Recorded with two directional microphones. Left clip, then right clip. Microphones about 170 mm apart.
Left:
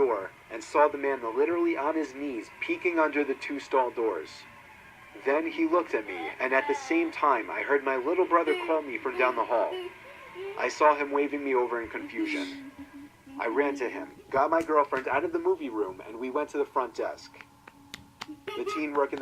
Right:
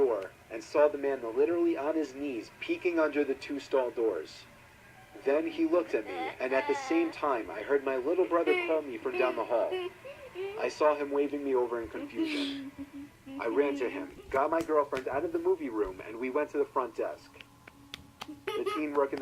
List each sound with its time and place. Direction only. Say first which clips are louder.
0.0 s radio: left 2 dB; 25° left (ahead or behind)
0.8 s speech: left 2 dB; 30° left (ahead or behind)
13.4 s speech: left 2 dB; 30° left (ahead or behind)
15.8 s speech: left 1 dB; 20° left (ahead or behind)
16.3 s speech: left 2 dB; 30° left (ahead or behind)
18.9 s speech: left 3 dB; 20° left (ahead or behind)